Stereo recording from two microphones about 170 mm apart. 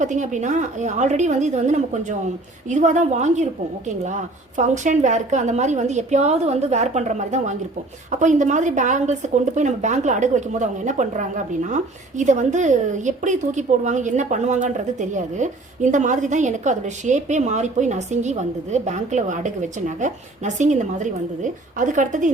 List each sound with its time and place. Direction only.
0.0 s a woman's voice: 45° right (ahead or behind)